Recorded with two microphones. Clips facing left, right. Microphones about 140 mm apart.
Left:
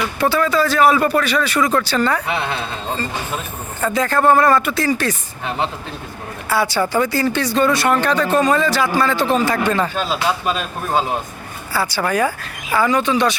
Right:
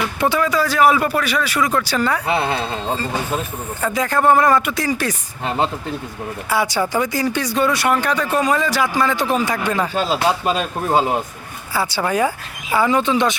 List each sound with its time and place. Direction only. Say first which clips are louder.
0.2 s speech: left 2 dB; 15° right (ahead or behind)
2.2 s speech: right 3 dB; 35° right (ahead or behind)
2.5 s speech: right 3 dB; 10° right (ahead or behind)
6.5 s speech: left 1 dB; 15° right (ahead or behind)
11.7 s speech: even; 20° right (ahead or behind)